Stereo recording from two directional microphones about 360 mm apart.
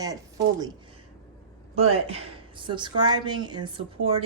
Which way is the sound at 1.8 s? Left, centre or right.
Centre.